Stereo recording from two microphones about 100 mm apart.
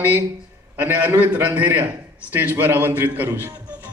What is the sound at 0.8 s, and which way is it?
A man's voice, 20° right (ahead or behind).